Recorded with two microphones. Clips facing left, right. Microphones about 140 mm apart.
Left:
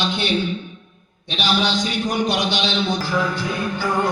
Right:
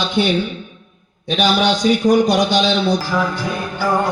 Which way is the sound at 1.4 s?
45° right (ahead or behind).